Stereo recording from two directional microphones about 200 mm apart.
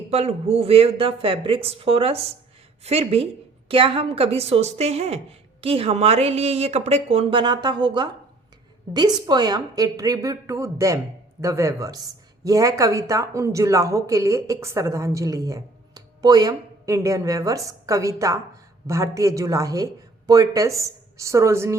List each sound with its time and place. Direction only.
0.1 s a woman's voice: 30° right (ahead or behind); by 21.8 s 15° right (ahead or behind)